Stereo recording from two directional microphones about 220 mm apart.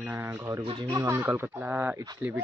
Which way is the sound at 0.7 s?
20° right (ahead or behind).